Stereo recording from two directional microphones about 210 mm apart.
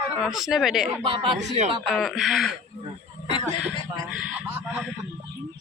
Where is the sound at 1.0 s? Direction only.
20° right (ahead or behind).